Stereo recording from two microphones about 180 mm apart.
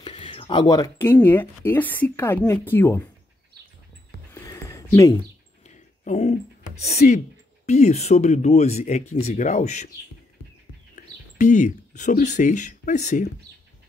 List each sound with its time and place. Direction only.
0.0 s speech: 30° left (ahead or behind); by 3.0 s 10° left (ahead or behind)
4.3 s a sound: 15° left (ahead or behind)
6.0 s speech: 40° left (ahead or behind)
11.0 s speech: 45° left (ahead or behind)